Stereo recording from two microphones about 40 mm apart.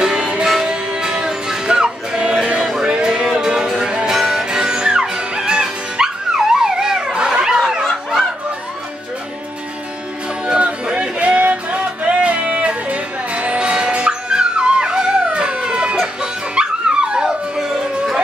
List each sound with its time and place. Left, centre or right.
0.0 s music: centre
4.5 s music: centre
6.3 s dog: centre
10.4 s music: right
11.1 s a sound: right
11.7 s music: right
13.6 s music: right
17.6 s howl: centre